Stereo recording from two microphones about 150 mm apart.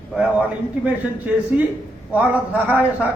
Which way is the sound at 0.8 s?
10° right (ahead or behind).